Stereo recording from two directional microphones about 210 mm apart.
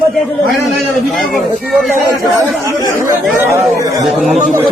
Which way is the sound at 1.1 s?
Centre (ahead or behind).